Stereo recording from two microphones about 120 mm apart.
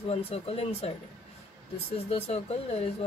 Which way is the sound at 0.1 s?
55° left (ahead or behind).